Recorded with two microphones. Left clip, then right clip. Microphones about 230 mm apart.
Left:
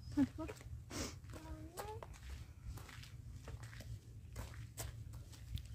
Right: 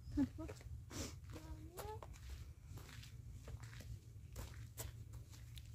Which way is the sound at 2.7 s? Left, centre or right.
Centre.